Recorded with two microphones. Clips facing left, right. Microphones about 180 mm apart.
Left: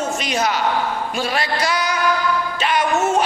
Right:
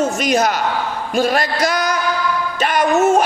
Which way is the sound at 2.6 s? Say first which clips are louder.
Right 5 dB; 45° right (ahead or behind).